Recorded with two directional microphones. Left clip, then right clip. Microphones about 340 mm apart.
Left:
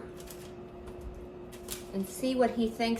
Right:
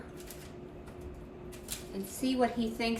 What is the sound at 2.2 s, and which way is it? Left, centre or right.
Speech, centre.